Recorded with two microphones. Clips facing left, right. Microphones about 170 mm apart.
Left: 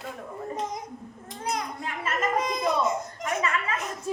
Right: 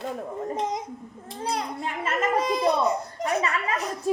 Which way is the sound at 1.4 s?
30° right (ahead or behind).